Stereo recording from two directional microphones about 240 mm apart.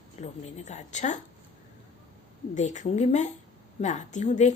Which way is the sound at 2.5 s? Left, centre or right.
Left.